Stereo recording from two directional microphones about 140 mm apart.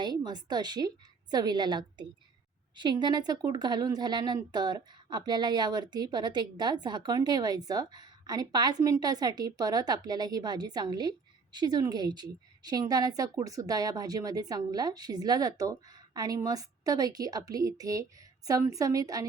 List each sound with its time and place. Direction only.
0.0 s a woman's voice: 30° right (ahead or behind)